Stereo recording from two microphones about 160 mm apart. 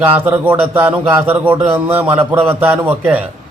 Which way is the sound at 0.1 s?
10° right (ahead or behind).